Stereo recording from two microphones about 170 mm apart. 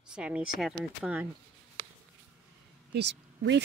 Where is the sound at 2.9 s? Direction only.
90° right.